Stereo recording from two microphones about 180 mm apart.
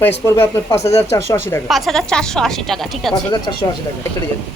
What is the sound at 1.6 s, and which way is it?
Speech, centre (ahead or behind).